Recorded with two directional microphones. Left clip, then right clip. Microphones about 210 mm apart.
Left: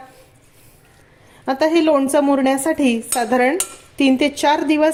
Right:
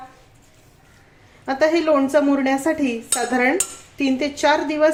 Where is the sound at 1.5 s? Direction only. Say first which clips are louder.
Left 2 dB; 45° left (ahead or behind).